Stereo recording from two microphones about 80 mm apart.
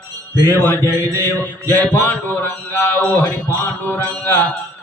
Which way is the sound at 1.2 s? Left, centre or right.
Left.